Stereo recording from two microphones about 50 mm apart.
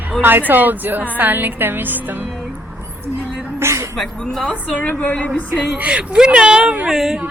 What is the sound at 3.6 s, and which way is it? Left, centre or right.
Speech, right.